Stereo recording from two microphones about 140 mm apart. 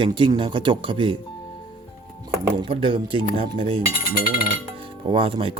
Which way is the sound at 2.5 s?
35° right (ahead or behind).